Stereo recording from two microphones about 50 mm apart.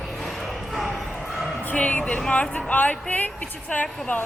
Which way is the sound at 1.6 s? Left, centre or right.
Left.